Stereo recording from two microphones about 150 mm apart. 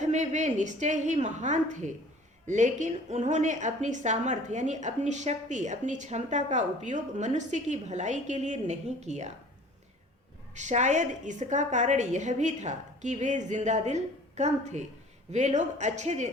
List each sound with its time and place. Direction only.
0.0 s a woman's voice: 50° right (ahead or behind)
10.5 s a woman's voice: 50° right (ahead or behind)